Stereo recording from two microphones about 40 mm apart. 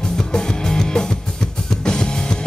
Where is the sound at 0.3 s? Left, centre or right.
Centre.